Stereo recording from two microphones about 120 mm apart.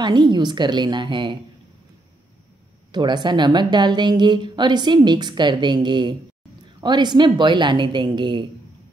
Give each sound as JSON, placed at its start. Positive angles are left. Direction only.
{"t": 0.0, "sound": "speech", "side_deg": -40}
{"t": 2.9, "sound": "speech", "side_deg": -40}